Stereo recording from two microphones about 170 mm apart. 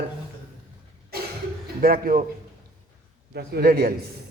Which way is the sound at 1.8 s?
60° right (ahead or behind).